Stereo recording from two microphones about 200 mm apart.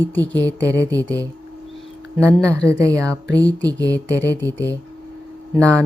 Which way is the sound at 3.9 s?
15° right (ahead or behind).